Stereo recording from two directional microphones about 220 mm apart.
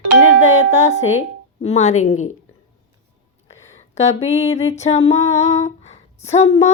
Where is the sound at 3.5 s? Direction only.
30° left (ahead or behind).